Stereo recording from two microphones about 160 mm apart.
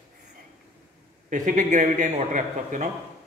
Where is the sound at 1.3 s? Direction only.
50° right (ahead or behind).